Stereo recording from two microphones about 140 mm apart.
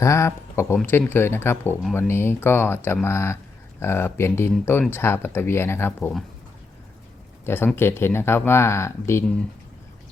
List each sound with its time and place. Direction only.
0.0 s speech: 20° left (ahead or behind)
7.4 s speech: 15° left (ahead or behind)